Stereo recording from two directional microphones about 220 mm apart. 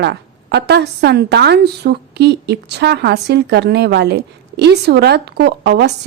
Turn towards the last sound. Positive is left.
turn(degrees=-50)  # may be behind; listen again after turning